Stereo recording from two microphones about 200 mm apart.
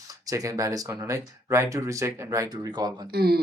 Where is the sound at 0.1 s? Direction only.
15° right (ahead or behind).